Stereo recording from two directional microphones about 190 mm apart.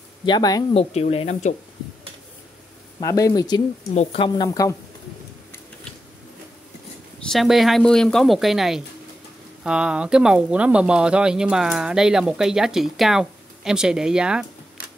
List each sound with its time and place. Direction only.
0.2 s speech: 20° left (ahead or behind)
0.7 s speech: 30° left (ahead or behind)
3.0 s speech: 15° left (ahead or behind)
3.9 s speech: 35° left (ahead or behind)
4.4 s speech: 15° left (ahead or behind)
7.2 s speech: centre (ahead or behind)